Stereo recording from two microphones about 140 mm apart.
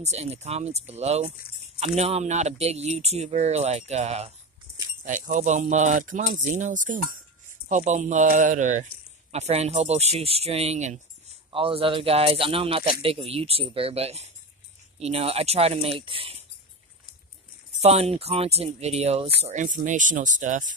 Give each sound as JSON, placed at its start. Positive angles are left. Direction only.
{"t": 0.0, "sound": "speech", "side_deg": -50}
{"t": 5.0, "sound": "speech", "side_deg": -65}
{"t": 9.3, "sound": "speech", "side_deg": -50}
{"t": 11.5, "sound": "speech", "side_deg": -40}
{"t": 17.7, "sound": "speech", "side_deg": -50}